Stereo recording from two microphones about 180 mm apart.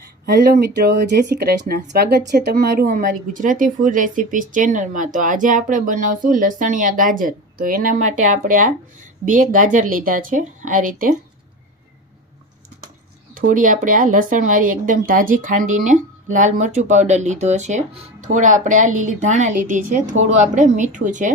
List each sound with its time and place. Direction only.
0.0 s speech: 55° right (ahead or behind)
13.3 s speech: 50° right (ahead or behind)